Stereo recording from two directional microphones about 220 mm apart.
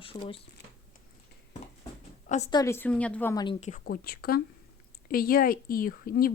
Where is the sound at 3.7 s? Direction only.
45° left (ahead or behind).